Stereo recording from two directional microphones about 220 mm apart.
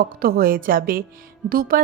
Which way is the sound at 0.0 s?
40° right (ahead or behind).